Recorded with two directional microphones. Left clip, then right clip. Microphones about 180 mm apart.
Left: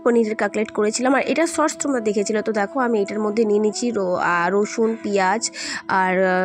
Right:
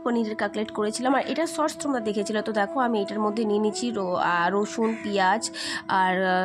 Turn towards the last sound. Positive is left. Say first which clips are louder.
# left 4 dB
turn(degrees=20)  # may be behind; listen again after turning